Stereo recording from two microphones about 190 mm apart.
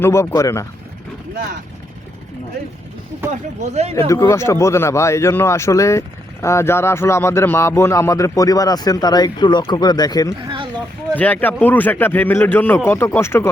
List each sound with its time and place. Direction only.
0.0 s speech: 15° left (ahead or behind)
3.6 s speech: 35° right (ahead or behind)
4.1 s speech: 15° left (ahead or behind)
11.2 s speech: 10° left (ahead or behind)